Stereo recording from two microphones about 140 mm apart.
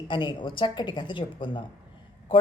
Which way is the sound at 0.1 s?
35° left (ahead or behind).